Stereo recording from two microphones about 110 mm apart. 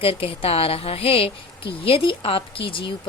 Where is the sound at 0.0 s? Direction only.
60° left (ahead or behind).